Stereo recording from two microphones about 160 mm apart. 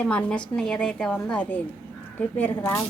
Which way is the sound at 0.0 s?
10° left (ahead or behind).